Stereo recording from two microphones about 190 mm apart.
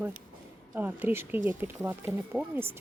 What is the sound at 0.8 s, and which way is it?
A woman's voice, 10° right (ahead or behind).